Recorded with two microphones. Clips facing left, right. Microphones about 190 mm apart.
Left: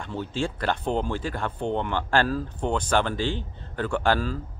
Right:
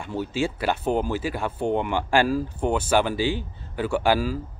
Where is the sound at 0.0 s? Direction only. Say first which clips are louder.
Right 3 dB; 10° right (ahead or behind).